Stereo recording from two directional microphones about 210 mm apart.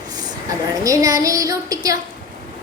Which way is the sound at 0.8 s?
15° right (ahead or behind).